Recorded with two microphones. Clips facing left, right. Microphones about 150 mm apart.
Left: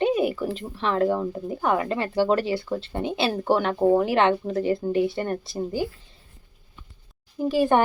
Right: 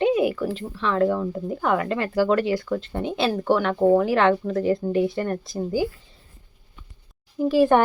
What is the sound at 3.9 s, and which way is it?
Speech, 25° left (ahead or behind).